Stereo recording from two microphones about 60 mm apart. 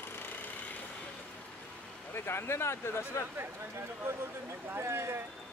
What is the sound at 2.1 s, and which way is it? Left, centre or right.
Speech, left.